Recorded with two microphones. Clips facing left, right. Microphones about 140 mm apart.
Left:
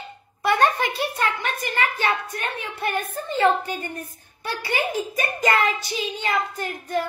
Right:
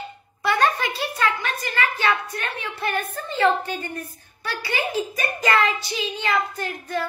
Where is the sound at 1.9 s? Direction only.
40° left (ahead or behind).